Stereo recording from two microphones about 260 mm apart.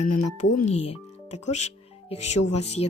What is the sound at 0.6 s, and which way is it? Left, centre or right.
Speech, left.